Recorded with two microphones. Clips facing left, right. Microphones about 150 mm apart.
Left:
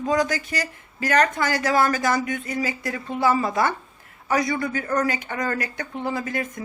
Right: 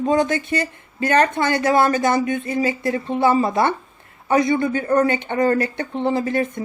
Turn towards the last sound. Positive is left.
turn(degrees=-30)  # may be behind; listen again after turning